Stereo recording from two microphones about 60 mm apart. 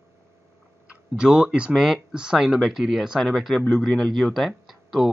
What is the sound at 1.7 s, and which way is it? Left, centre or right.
Speech, centre.